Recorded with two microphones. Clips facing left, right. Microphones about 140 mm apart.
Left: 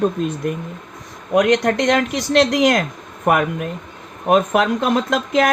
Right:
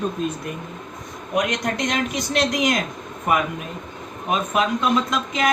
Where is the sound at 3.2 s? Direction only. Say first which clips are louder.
Left 5 dB; 65° left (ahead or behind).